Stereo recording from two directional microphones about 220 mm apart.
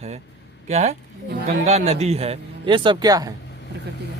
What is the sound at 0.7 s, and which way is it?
Speech, 30° right (ahead or behind).